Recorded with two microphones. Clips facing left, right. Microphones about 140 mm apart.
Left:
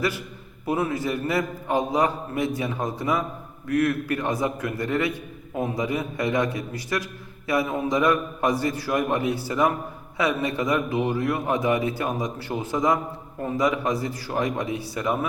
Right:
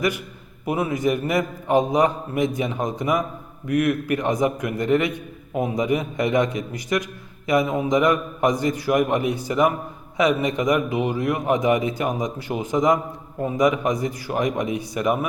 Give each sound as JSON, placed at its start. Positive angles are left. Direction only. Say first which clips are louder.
{"t": 0.6, "sound": "a man's voice", "louder": "right 3 dB", "side_deg": -15}